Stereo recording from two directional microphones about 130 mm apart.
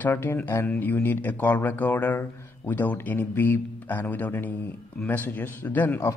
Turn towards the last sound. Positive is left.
turn(degrees=15)  # may be behind; listen again after turning